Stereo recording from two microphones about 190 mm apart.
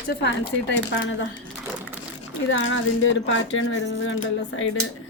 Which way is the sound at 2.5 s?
85° left.